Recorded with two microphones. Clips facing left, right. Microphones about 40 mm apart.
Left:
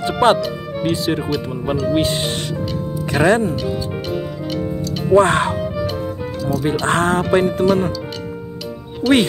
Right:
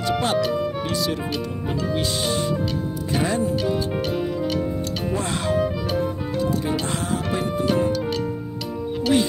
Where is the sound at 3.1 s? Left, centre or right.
Left.